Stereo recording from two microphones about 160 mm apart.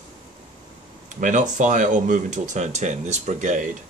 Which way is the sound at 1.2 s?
50° right (ahead or behind).